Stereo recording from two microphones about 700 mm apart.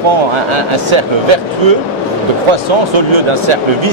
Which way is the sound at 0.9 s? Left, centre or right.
Right.